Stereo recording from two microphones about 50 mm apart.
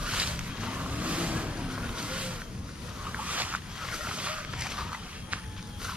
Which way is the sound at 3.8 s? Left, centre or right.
Centre.